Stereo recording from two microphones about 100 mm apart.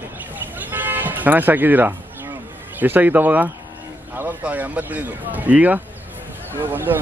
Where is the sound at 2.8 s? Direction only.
15° right (ahead or behind).